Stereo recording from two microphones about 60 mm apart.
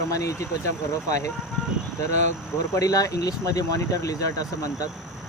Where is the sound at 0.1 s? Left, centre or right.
Left.